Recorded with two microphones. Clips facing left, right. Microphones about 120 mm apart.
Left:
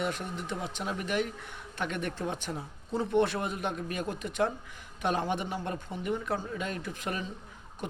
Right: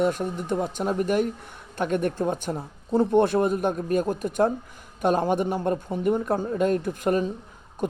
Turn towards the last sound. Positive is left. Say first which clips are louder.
# right 12 dB
turn(degrees=-45)  # may be behind; listen again after turning